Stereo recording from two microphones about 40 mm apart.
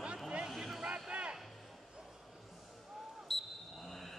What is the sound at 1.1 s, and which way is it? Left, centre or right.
Music, right.